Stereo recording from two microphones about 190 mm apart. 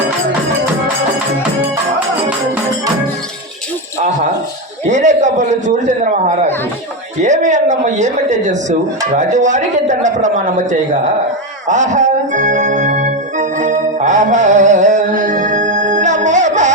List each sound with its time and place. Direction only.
4.9 s a man's voice: 40° right (ahead or behind)
11.7 s organ: 40° right (ahead or behind)